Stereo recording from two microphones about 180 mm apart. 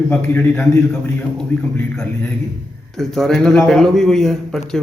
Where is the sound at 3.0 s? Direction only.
Centre (ahead or behind).